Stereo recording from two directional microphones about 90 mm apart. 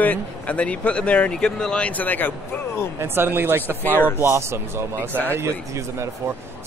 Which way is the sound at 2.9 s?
25° right (ahead or behind).